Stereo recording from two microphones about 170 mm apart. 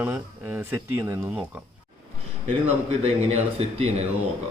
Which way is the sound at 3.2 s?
40° right (ahead or behind).